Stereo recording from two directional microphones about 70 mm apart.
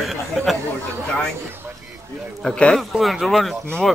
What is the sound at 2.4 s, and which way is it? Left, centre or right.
Speech, centre.